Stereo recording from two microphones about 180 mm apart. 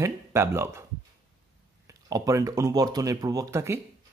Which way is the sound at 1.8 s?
20° right (ahead or behind).